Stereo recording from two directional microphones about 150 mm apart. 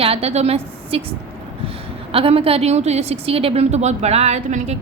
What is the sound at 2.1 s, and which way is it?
A woman's voice, 40° right (ahead or behind).